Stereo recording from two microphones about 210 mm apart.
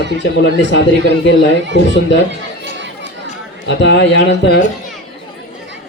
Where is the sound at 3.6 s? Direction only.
55° left (ahead or behind).